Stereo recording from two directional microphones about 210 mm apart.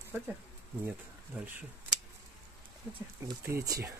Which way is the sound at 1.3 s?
10° right (ahead or behind).